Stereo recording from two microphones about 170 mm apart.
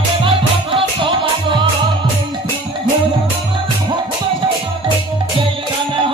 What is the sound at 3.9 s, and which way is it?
Music, 25° right (ahead or behind).